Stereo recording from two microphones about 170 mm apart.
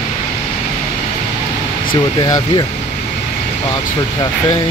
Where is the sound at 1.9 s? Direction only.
25° left (ahead or behind).